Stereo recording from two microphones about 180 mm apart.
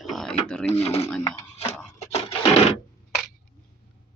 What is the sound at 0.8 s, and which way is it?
Speech, 35° left (ahead or behind).